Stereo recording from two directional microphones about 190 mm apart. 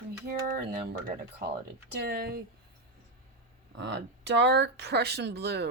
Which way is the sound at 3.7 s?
65° right (ahead or behind).